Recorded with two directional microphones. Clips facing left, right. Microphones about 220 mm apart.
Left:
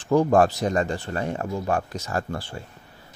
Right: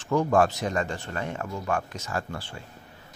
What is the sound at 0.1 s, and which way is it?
Speech, 35° left (ahead or behind).